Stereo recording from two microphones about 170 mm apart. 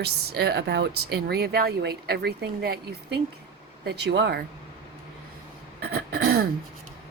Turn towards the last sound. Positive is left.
turn(degrees=-65)  # may be behind; listen again after turning